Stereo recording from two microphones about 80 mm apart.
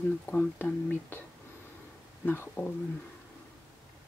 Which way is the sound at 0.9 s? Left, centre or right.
Left.